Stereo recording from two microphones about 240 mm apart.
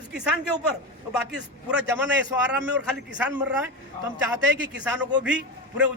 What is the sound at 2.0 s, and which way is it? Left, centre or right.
A man's voice, centre.